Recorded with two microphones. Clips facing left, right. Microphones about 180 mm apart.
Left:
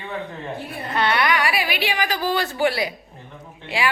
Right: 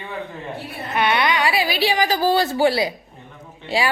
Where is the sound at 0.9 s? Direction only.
20° right (ahead or behind).